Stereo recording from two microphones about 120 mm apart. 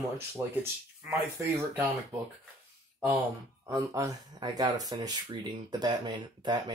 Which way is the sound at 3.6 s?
25° right (ahead or behind).